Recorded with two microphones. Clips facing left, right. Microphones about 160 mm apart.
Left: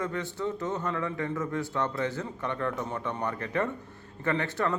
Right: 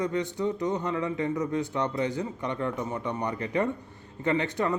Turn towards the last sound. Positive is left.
turn(degrees=-15)  # may be behind; listen again after turning